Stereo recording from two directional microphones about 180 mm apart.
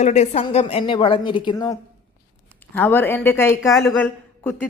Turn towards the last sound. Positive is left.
turn(degrees=10)  # may be behind; listen again after turning